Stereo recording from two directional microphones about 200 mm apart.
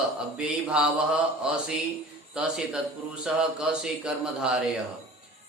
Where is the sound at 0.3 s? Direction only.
5° right (ahead or behind).